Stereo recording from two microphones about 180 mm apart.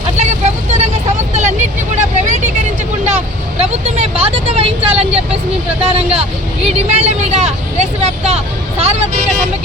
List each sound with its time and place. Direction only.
0.2 s vehicle: 40° right (ahead or behind)
3.6 s vehicle: 35° right (ahead or behind)
5.8 s speech: 35° right (ahead or behind)